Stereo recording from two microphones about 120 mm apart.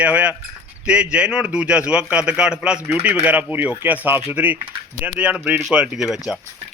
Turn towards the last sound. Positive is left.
turn(degrees=-10)  # may be behind; listen again after turning